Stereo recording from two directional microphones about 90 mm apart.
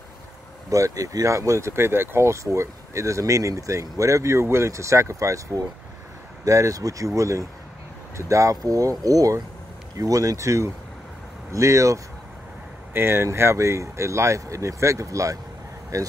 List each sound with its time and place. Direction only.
0.7 s speech: 40° right (ahead or behind)